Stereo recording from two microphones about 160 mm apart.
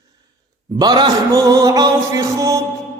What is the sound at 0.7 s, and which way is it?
Mantra, 25° right (ahead or behind).